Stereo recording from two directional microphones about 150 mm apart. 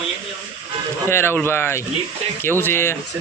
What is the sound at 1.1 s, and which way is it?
Speech, 15° left (ahead or behind).